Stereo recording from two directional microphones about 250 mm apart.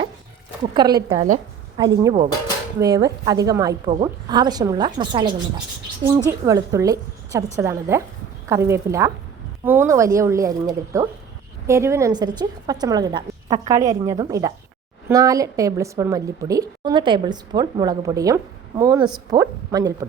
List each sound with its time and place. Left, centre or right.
0.7 s a woman's voice: centre